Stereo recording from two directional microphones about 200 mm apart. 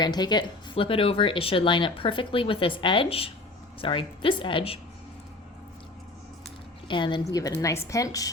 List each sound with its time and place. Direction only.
0.0 s speech: 20° left (ahead or behind)
6.8 s a woman's voice: 25° left (ahead or behind)